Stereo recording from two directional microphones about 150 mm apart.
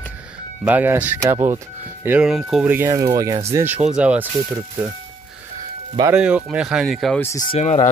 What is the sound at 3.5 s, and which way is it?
Speech, 10° right (ahead or behind).